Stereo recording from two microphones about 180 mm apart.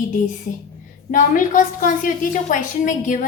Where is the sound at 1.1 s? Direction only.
45° left (ahead or behind).